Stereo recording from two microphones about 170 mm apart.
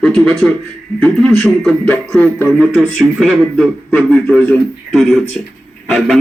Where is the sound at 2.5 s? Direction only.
Centre (ahead or behind).